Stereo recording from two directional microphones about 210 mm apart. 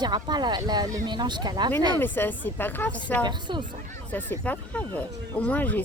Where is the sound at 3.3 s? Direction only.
20° right (ahead or behind).